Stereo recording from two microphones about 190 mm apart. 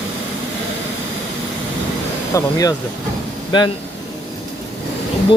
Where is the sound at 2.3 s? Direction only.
20° left (ahead or behind).